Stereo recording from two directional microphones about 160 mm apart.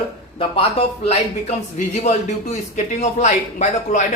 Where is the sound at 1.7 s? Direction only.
45° left (ahead or behind).